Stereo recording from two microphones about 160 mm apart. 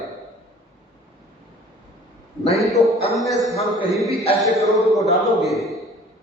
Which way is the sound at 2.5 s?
Centre (ahead or behind).